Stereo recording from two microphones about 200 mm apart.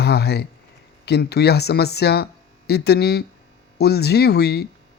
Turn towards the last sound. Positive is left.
turn(degrees=55)  # may be behind; listen again after turning